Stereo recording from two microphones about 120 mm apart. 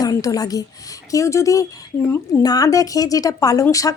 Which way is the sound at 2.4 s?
30° left (ahead or behind).